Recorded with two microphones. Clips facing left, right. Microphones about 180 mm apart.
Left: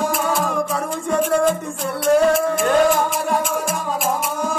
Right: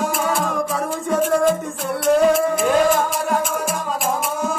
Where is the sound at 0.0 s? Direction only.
Centre (ahead or behind).